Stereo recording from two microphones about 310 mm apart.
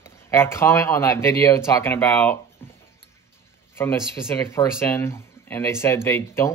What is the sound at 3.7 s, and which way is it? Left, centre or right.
Speech, centre.